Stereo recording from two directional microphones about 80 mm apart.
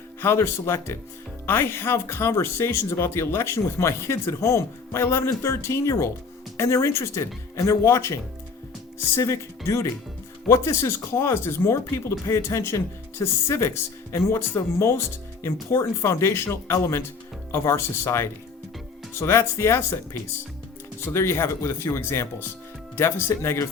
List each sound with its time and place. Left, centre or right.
0.2 s speech: left
21.1 s speech: left